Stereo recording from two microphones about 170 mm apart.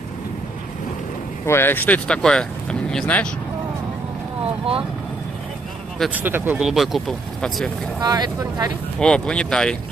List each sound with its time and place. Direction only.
1.4 s speech: 15° left (ahead or behind)
5.9 s speech: 10° right (ahead or behind)
8.0 s speech: 25° right (ahead or behind)
9.0 s speech: 5° left (ahead or behind)